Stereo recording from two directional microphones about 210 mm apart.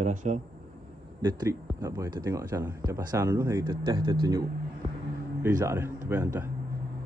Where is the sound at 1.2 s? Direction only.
15° right (ahead or behind).